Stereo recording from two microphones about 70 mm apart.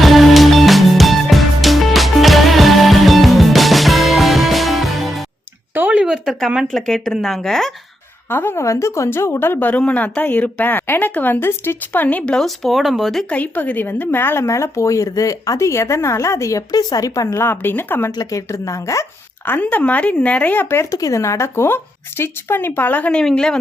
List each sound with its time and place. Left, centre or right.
0.0 s music: centre
5.7 s a sound: right
6.0 s a sound: centre
6.7 s speech: centre
8.3 s speech: left
8.6 s a woman's voice: left; by 13.2 s centre
13.3 s speech: left
16.7 s speech: left
17.3 s speech: left
18.3 s speech: left
19.5 s a woman's voice: left
20.9 s speech: left
23.1 s a woman's voice: centre